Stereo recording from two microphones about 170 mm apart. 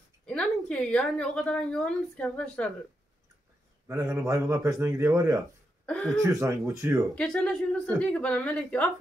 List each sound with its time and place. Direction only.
0.3 s a woman's voice: 5° left (ahead or behind)
3.8 s a man's voice: 15° right (ahead or behind)
5.9 s speech: 5° left (ahead or behind)
6.2 s a man's voice: 20° right (ahead or behind)
7.2 s a woman's voice: 5° left (ahead or behind)